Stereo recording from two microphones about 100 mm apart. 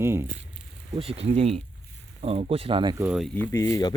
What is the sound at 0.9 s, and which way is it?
Speech, 85° right.